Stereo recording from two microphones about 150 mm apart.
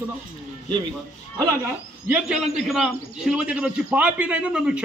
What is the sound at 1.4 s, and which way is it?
Speech, 20° right (ahead or behind).